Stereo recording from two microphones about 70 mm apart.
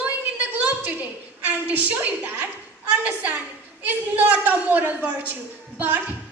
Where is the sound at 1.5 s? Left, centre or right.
Right.